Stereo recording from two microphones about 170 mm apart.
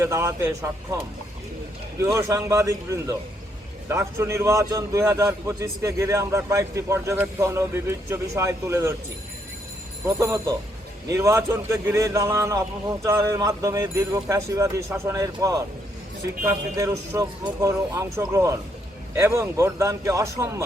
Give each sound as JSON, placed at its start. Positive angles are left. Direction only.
{"t": 0.0, "sound": "a man's voice", "side_deg": -15}
{"t": 2.0, "sound": "a man's voice", "side_deg": -15}
{"t": 10.2, "sound": "a man's voice", "side_deg": -15}